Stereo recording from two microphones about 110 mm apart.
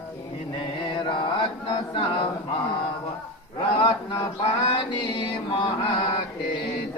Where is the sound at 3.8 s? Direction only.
45° left (ahead or behind).